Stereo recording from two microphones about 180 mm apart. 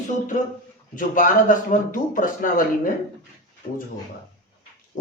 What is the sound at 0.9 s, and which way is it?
Speech, 45° left (ahead or behind).